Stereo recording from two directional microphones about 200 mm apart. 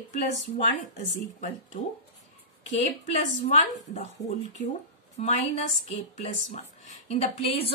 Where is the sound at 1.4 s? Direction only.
35° left (ahead or behind).